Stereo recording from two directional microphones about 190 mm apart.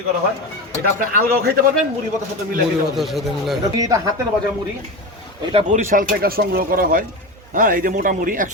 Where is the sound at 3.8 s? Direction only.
20° right (ahead or behind).